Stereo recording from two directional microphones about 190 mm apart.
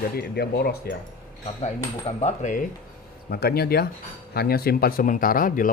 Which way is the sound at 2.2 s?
40° left (ahead or behind).